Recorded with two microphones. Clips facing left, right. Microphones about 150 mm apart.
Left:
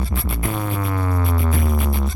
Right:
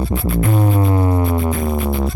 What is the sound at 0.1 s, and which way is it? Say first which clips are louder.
Music: right 9 dB; 30° right (ahead or behind).